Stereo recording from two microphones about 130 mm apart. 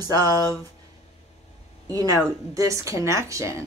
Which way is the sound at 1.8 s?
25° right (ahead or behind).